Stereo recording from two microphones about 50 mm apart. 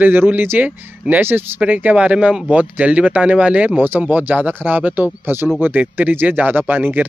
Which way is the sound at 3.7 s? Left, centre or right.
Right.